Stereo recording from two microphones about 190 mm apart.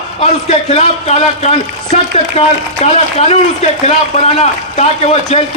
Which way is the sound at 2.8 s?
35° left (ahead or behind).